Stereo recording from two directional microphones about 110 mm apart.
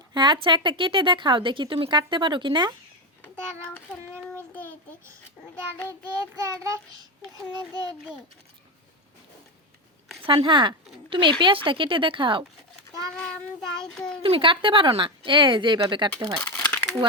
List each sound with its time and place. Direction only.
0.1 s a woman's voice: 40° right (ahead or behind)
3.6 s child singing: 10° left (ahead or behind)
5.9 s child singing: 30° right (ahead or behind)
10.2 s a woman's voice: 50° right (ahead or behind)
13.1 s child singing: 5° left (ahead or behind)
14.2 s a woman's voice: 55° right (ahead or behind)
16.6 s a sound: 15° left (ahead or behind)